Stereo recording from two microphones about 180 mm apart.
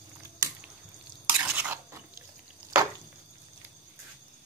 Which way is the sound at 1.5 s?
10° right (ahead or behind).